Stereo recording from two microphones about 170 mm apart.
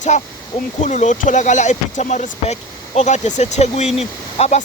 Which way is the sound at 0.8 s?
45° left (ahead or behind).